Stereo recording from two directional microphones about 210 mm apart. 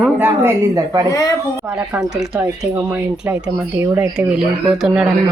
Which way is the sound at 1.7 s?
5° right (ahead or behind).